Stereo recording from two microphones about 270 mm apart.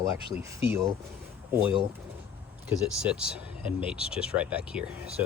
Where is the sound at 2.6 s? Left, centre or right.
Centre.